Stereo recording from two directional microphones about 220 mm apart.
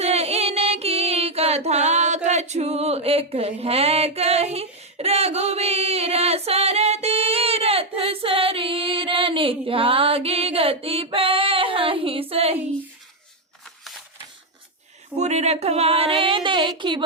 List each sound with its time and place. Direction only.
0.0 s music: 30° right (ahead or behind)
15.2 s speech: 30° right (ahead or behind)